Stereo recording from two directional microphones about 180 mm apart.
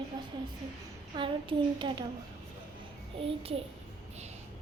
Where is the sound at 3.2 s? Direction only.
30° right (ahead or behind).